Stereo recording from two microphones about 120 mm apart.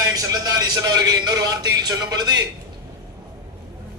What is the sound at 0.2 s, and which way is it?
A man's voice, 30° right (ahead or behind).